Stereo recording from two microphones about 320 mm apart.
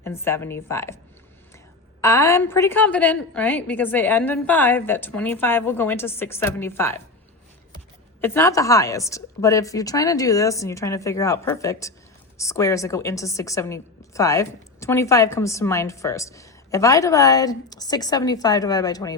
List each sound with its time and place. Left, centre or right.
0.0 s a woman's voice: centre
2.0 s a woman's voice: centre
8.2 s a woman's voice: centre